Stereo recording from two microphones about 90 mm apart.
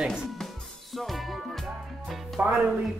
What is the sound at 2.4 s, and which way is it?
Speech, 20° right (ahead or behind).